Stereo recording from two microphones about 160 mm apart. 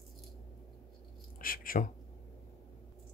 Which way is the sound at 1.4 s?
60° left (ahead or behind).